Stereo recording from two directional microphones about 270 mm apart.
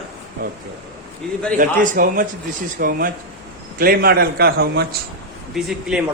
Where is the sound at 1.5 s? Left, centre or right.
Right.